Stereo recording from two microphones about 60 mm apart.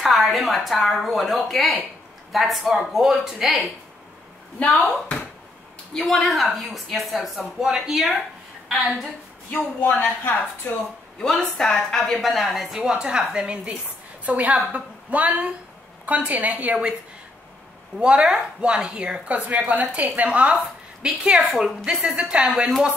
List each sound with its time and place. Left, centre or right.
0.0 s speech: centre
5.0 s a sound: left
5.9 s speech: centre
9.5 s speech: left
11.1 s speech: centre
14.2 s a woman's voice: right
17.9 s a woman's voice: centre
21.0 s speech: centre
22.1 s a woman's voice: centre